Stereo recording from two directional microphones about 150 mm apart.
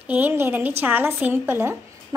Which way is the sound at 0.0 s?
10° right (ahead or behind).